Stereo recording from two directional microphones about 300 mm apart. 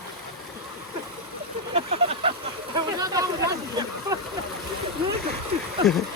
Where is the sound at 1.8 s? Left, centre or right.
Centre.